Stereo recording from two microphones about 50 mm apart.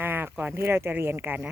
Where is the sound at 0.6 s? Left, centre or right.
Right.